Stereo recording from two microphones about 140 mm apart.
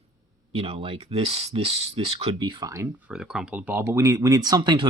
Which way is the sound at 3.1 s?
5° right (ahead or behind).